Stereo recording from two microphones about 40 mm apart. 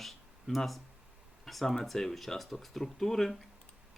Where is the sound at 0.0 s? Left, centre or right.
Centre.